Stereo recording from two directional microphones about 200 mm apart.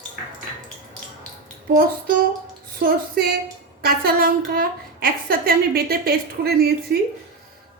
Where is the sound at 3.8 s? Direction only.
50° right (ahead or behind).